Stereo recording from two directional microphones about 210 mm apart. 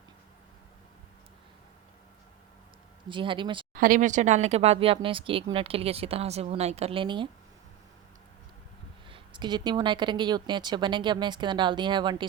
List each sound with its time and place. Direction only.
3.1 s speech: 25° right (ahead or behind)
3.8 s speech: 40° right (ahead or behind); by 7.3 s 25° right (ahead or behind)
9.0 s speech: 25° right (ahead or behind)